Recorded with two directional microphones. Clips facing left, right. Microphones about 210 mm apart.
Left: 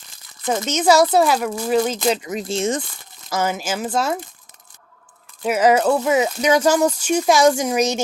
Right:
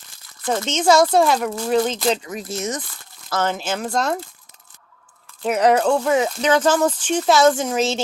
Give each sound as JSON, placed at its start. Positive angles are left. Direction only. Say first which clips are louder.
{"t": 0.6, "sound": "speech", "louder": "even", "side_deg": 5}
{"t": 2.2, "sound": "speech", "louder": "left 5 dB", "side_deg": 25}
{"t": 3.2, "sound": "speech", "louder": "even", "side_deg": 10}
{"t": 5.4, "sound": "speech", "louder": "left 1 dB", "side_deg": 5}